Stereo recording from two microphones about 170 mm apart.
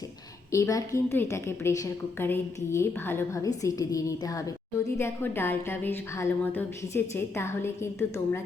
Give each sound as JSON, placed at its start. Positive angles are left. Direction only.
{"t": 0.5, "sound": "a woman's voice", "side_deg": 15}